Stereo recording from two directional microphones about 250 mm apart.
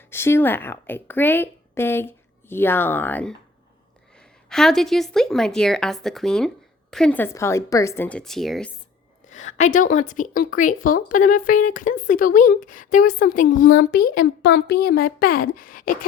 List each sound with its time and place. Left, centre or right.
0.1 s a woman's voice: centre
4.4 s a woman's voice: centre
9.3 s a woman's voice: left